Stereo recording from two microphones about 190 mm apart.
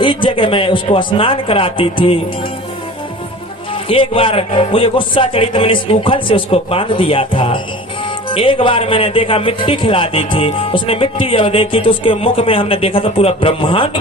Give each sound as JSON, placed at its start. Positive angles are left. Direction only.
{"t": 0.0, "sound": "speech", "side_deg": 25}
{"t": 3.8, "sound": "speech", "side_deg": 30}